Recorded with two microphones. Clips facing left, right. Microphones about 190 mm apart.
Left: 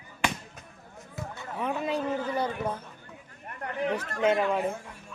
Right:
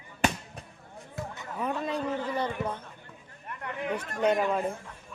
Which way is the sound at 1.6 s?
5° left (ahead or behind).